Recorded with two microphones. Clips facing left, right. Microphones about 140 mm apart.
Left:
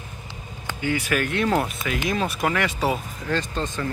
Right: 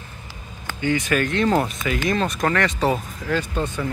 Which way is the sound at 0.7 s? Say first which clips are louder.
Right 3 dB; 10° left (ahead or behind).